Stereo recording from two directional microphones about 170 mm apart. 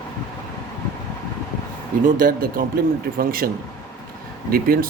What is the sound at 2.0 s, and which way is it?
Speech, 55° right (ahead or behind).